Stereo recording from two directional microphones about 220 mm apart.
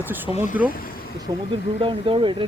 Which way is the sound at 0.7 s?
40° left (ahead or behind).